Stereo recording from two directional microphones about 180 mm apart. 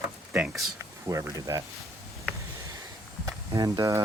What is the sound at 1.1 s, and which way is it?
Speech, 20° right (ahead or behind).